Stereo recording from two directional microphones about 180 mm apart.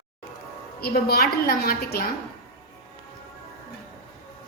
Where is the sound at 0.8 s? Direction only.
60° left (ahead or behind).